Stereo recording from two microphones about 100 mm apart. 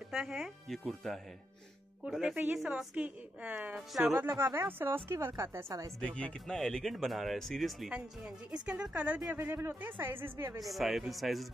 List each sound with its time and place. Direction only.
0.1 s a woman's voice: 5° right (ahead or behind); by 5.9 s 30° right (ahead or behind)
5.9 s speech: 10° left (ahead or behind)
8.6 s a woman's voice: 10° right (ahead or behind)
10.6 s speech: centre (ahead or behind)